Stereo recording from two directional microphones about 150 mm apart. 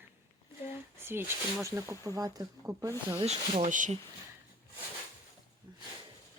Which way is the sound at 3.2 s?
40° right (ahead or behind).